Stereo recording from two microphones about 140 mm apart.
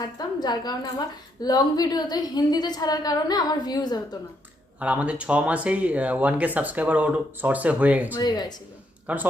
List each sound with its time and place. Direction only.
0.0 s a woman's voice: 30° left (ahead or behind)
4.8 s speech: 10° right (ahead or behind)
8.2 s a woman's voice: 30° left (ahead or behind)
9.1 s speech: 10° right (ahead or behind)